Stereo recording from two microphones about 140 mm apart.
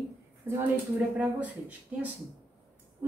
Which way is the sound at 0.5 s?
10° right (ahead or behind).